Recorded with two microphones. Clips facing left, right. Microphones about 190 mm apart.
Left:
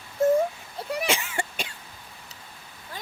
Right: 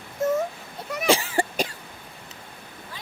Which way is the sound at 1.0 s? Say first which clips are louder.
Right 7 dB; 35° right (ahead or behind).